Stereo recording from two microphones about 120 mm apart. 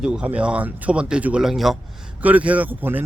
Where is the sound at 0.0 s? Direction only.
5° right (ahead or behind).